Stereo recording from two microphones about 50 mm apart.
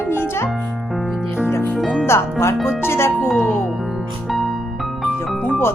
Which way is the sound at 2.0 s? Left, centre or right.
Left.